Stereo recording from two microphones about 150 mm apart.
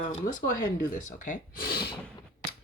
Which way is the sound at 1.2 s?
70° left (ahead or behind).